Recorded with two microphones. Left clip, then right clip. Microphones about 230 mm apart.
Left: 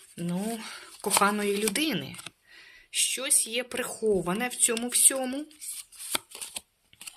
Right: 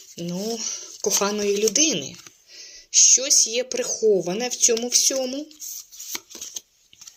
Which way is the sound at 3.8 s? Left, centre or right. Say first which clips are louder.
Right 8 dB; left.